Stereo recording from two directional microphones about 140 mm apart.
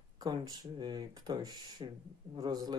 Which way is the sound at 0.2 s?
30° right (ahead or behind).